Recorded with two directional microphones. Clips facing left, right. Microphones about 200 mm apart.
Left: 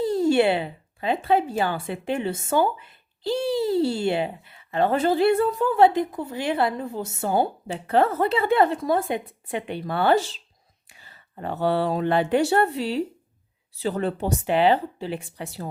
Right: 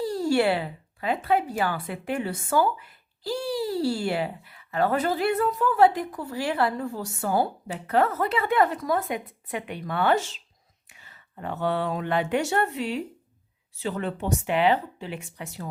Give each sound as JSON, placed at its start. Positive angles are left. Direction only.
{"t": 0.0, "sound": "speech", "side_deg": 20}